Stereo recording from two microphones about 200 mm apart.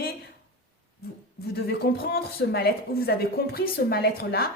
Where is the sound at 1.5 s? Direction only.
50° left (ahead or behind).